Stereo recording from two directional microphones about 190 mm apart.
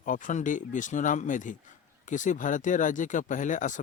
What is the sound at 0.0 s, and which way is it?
Speech, 40° left (ahead or behind).